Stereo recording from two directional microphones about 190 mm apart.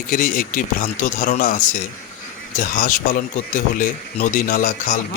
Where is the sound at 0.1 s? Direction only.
45° left (ahead or behind).